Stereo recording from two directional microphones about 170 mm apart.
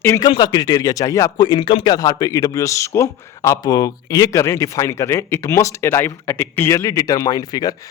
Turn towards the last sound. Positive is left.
turn(degrees=20)  # may be behind; listen again after turning